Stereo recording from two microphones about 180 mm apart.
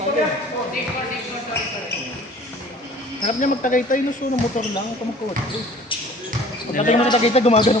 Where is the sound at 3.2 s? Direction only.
45° left (ahead or behind).